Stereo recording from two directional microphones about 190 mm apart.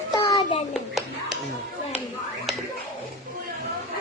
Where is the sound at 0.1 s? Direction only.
20° left (ahead or behind).